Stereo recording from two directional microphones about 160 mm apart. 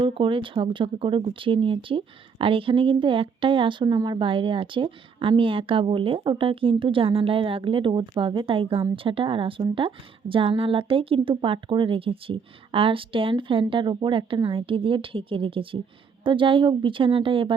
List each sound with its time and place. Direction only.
0.0 s speech: 30° right (ahead or behind)